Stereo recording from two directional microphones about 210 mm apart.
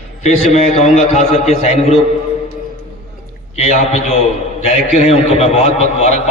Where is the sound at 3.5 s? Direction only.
30° left (ahead or behind).